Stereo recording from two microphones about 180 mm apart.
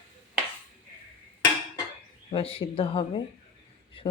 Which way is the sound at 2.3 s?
30° left (ahead or behind).